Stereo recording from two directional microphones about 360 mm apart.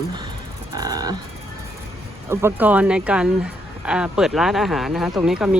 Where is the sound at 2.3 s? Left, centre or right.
Centre.